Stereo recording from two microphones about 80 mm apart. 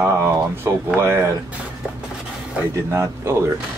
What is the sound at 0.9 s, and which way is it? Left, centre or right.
Speech, right.